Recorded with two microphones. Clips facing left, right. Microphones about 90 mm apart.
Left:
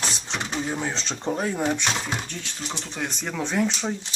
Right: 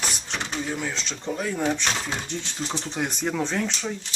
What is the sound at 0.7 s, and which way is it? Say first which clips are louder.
Speech: left 1 dB; 25° left (ahead or behind).